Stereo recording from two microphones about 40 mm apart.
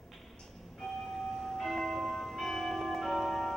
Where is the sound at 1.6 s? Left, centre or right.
Centre.